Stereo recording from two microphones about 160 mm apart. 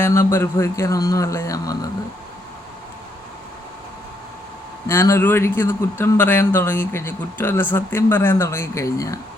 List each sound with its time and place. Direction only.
0.0 s a man's voice: 15° left (ahead or behind)
4.9 s speech: 15° left (ahead or behind)